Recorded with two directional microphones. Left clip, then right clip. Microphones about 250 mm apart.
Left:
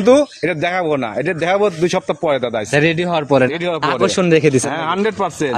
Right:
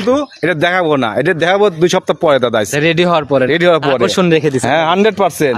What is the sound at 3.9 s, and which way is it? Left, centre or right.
Speech, centre.